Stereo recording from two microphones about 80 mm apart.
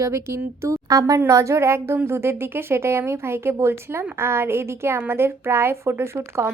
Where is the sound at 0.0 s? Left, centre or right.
Right.